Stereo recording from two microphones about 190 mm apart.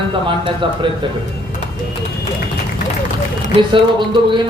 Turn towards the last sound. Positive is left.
turn(degrees=-25)  # may be behind; listen again after turning